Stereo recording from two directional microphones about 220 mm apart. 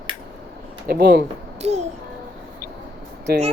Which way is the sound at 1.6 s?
30° right (ahead or behind).